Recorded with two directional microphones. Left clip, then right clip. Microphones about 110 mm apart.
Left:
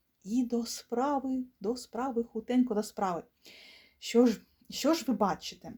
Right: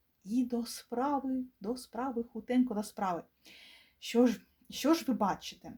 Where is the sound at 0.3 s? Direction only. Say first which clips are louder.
Left 2 dB; 40° left (ahead or behind).